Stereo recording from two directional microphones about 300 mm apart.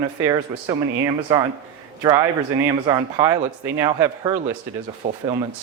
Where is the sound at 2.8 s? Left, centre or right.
Centre.